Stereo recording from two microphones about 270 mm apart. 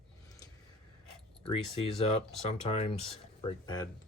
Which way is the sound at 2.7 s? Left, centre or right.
Left.